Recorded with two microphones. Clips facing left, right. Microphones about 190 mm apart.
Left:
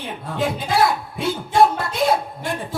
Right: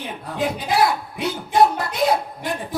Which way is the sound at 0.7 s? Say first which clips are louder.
Even; 25° left (ahead or behind).